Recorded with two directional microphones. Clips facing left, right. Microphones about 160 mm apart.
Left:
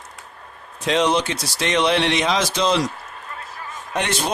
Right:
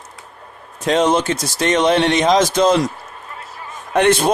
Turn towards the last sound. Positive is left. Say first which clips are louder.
# right 9 dB
turn(degrees=-55)  # may be behind; listen again after turning